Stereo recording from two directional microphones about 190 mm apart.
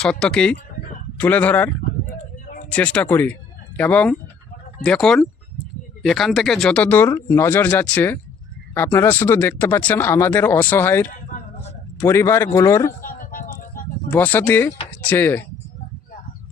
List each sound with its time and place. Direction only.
0.0 s speech: 5° left (ahead or behind)
13.0 s a sound: 50° left (ahead or behind)
14.1 s speech: 10° left (ahead or behind)